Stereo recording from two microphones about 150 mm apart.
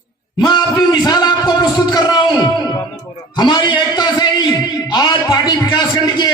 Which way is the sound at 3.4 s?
25° left (ahead or behind).